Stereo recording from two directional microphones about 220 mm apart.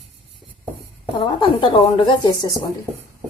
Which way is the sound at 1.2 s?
20° left (ahead or behind).